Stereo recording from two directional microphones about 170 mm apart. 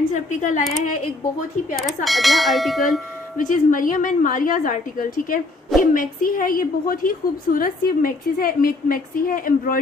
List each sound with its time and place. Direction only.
0.1 s a woman's voice: 45° left (ahead or behind)
2.0 s speech: centre (ahead or behind)
3.3 s a woman's voice: 50° left (ahead or behind)